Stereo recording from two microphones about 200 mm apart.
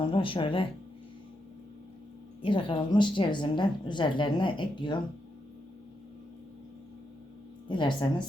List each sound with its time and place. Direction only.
0.0 s speech: 25° left (ahead or behind)
2.4 s a woman's voice: 25° left (ahead or behind)
7.7 s a woman's voice: 25° left (ahead or behind)